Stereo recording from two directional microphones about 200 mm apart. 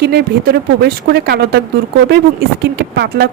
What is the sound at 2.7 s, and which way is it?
Speech, 55° right (ahead or behind).